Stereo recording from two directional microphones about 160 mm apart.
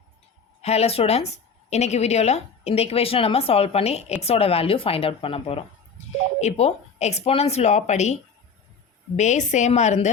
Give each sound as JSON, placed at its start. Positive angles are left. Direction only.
{"t": 0.6, "sound": "a woman's voice", "side_deg": 40}